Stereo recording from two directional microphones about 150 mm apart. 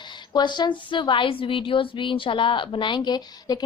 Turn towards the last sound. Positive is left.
turn(degrees=30)  # may be behind; listen again after turning